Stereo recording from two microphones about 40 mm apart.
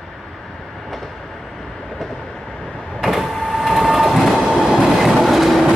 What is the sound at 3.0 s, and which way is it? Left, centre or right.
Train, centre.